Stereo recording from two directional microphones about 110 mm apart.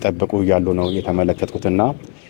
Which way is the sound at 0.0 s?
20° left (ahead or behind).